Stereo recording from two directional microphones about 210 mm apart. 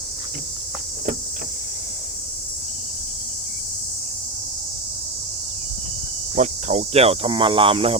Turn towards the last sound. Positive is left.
turn(degrees=-25)  # may be behind; listen again after turning